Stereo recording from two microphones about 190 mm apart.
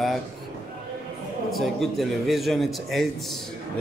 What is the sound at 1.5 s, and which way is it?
A man's voice, centre (ahead or behind).